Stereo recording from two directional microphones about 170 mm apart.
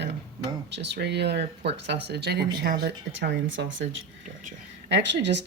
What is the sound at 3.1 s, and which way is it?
Speech, 90° right.